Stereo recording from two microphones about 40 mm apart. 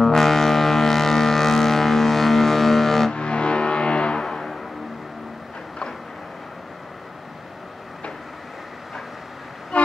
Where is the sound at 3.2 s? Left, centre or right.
Left.